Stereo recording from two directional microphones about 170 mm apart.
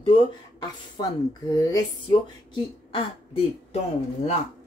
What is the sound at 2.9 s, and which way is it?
Speech, 30° left (ahead or behind).